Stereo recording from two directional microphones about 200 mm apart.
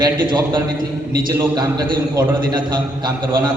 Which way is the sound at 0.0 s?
20° right (ahead or behind).